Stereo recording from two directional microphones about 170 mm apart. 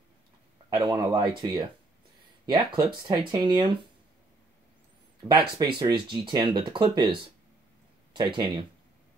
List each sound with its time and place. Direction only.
0.7 s speech: 25° right (ahead or behind)
5.3 s speech: 30° right (ahead or behind)
8.1 s speech: 25° right (ahead or behind)